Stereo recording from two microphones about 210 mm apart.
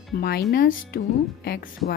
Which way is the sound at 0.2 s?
50° left (ahead or behind).